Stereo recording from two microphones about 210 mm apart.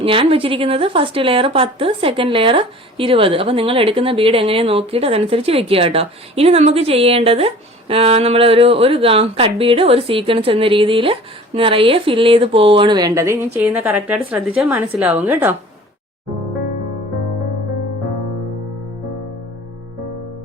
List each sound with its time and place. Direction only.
0.0 s a woman's voice: 25° right (ahead or behind); by 15.5 s 10° right (ahead or behind)